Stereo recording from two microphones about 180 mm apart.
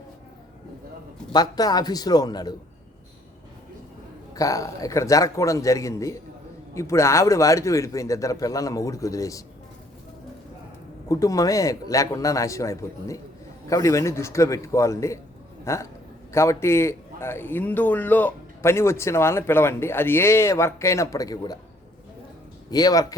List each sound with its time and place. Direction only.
1.3 s a man's voice: 20° left (ahead or behind)
4.4 s a man's voice: 20° left (ahead or behind)
11.1 s a man's voice: 20° left (ahead or behind)
22.7 s a man's voice: 20° left (ahead or behind)